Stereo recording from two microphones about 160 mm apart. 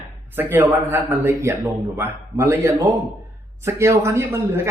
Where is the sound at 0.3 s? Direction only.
15° right (ahead or behind).